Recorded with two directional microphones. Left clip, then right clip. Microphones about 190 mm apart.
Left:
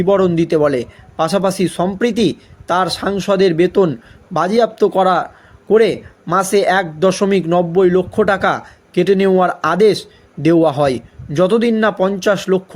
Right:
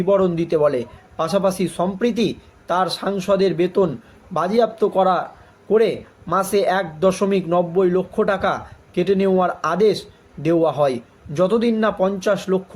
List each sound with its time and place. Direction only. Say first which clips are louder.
0.0 s a man's voice: left 4 dB; 40° left (ahead or behind)